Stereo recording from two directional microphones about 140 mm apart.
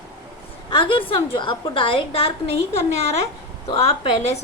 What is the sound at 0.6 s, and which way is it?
A woman's voice, 40° left (ahead or behind).